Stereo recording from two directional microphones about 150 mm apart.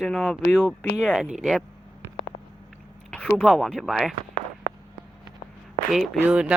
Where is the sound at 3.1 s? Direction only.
5° left (ahead or behind).